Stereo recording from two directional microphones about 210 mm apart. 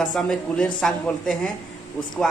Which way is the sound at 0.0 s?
5° left (ahead or behind).